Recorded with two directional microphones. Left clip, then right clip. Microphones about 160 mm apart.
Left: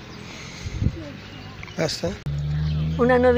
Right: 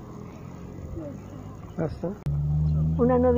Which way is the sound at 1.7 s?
30° left (ahead or behind).